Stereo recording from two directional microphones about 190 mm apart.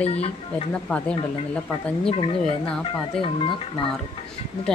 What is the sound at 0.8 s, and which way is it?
Speech, 5° left (ahead or behind).